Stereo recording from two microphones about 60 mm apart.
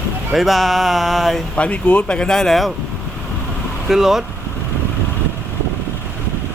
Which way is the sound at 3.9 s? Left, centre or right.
Centre.